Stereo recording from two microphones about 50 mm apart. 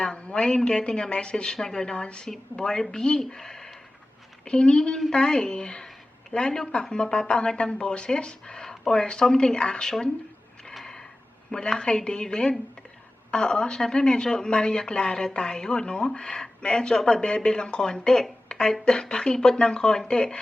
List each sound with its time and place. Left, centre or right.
0.0 s a woman's voice: left
11.5 s a woman's voice: centre